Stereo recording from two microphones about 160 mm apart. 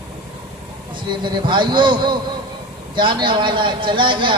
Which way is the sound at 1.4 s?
30° right (ahead or behind).